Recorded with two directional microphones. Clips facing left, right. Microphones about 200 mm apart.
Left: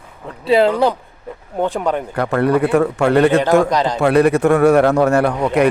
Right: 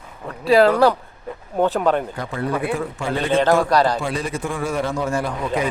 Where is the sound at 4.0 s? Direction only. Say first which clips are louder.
Left 13 dB; 65° left (ahead or behind).